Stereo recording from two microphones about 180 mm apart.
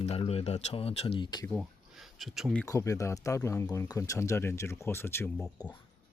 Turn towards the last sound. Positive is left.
turn(degrees=20)  # may be behind; listen again after turning